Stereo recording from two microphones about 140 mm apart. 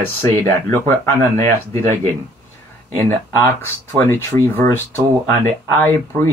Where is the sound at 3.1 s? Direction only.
15° left (ahead or behind).